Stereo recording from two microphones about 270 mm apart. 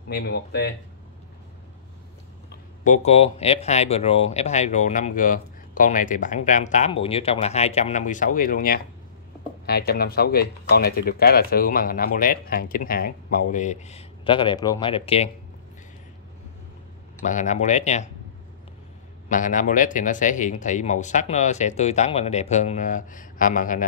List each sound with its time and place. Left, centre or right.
0.1 s speech: left
2.8 s speech: left
17.3 s speech: left
19.2 s speech: left